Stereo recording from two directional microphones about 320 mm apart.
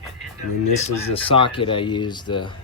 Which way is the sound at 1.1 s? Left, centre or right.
Centre.